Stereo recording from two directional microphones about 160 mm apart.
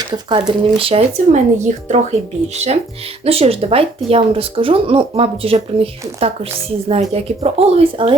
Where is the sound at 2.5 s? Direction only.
45° right (ahead or behind).